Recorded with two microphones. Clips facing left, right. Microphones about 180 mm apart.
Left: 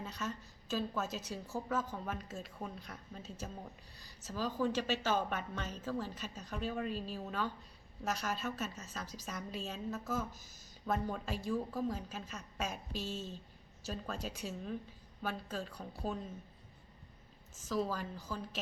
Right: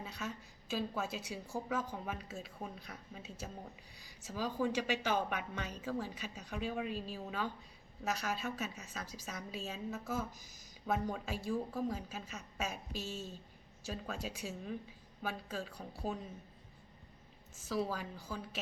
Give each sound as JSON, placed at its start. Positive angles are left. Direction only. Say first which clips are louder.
{"t": 0.0, "sound": "speech", "louder": "left 2 dB", "side_deg": -10}
{"t": 17.6, "sound": "speech", "louder": "left 1 dB", "side_deg": -10}